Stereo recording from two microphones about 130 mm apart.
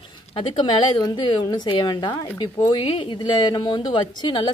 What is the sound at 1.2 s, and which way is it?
A woman's voice, 35° left (ahead or behind).